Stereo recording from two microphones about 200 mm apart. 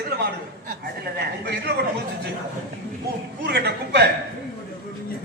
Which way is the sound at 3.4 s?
55° right (ahead or behind).